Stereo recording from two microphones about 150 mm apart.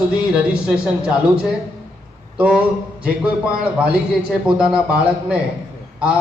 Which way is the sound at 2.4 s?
10° right (ahead or behind).